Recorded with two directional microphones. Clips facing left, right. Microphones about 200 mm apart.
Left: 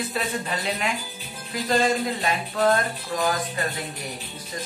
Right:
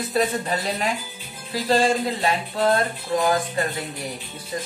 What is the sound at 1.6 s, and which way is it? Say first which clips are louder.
Speech: right 2 dB; 30° right (ahead or behind).